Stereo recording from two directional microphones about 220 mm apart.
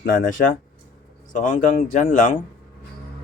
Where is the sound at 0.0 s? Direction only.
40° left (ahead or behind).